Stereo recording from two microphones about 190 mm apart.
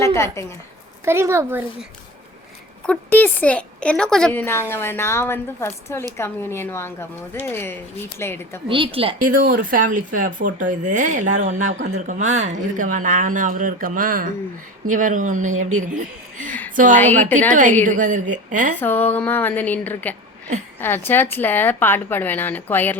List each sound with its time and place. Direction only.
0.0 s a woman's voice: 15° left (ahead or behind)
1.0 s speech: 15° right (ahead or behind)
2.8 s speech: 5° left (ahead or behind)
8.6 s a woman's voice: 30° right (ahead or behind)
9.1 s a woman's voice: 45° right (ahead or behind)
18.8 s speech: 10° left (ahead or behind)